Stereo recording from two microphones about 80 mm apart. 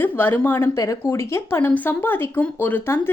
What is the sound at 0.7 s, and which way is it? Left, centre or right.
Speech, left.